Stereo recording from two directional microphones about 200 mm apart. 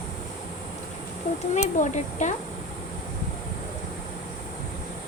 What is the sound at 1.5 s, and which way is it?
Speech, 35° left (ahead or behind).